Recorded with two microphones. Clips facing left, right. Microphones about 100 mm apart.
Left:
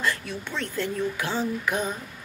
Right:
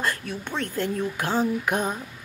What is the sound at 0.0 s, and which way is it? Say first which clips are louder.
Male singing: even; 50° right (ahead or behind).